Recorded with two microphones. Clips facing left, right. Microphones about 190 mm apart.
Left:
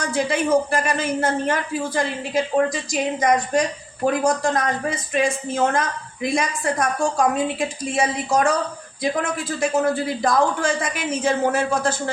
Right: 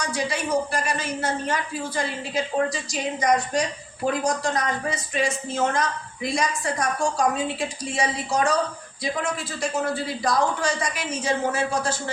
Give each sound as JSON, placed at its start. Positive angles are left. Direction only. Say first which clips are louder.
{"t": 0.0, "sound": "a man's voice", "louder": "left 5 dB", "side_deg": 55}